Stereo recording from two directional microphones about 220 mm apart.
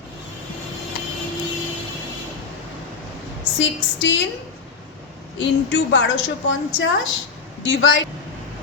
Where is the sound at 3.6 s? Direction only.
55° left (ahead or behind).